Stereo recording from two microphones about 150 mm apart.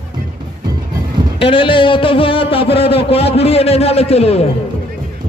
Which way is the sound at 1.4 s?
35° left (ahead or behind).